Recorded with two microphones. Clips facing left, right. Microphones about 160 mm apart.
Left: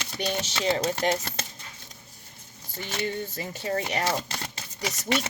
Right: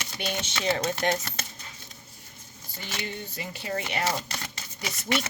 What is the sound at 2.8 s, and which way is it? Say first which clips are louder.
Speech: left 5 dB; 45° left (ahead or behind).